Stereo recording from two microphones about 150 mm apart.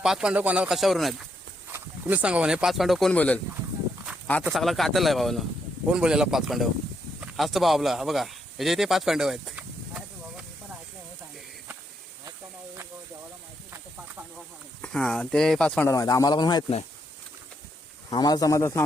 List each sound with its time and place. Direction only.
0.0 s speech: 5° right (ahead or behind)
1.7 s speech: 10° right (ahead or behind)
14.8 s speech: 5° left (ahead or behind)
15.9 s speech: 20° left (ahead or behind)
18.1 s speech: 25° left (ahead or behind)